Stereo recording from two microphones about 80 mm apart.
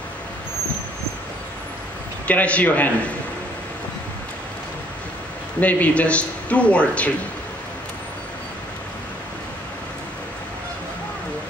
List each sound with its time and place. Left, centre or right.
2.2 s speech: centre
5.6 s speech: centre